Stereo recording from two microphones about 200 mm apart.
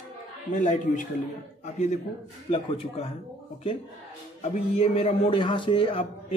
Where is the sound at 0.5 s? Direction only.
40° left (ahead or behind).